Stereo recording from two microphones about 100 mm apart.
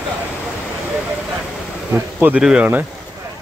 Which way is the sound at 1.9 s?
15° right (ahead or behind).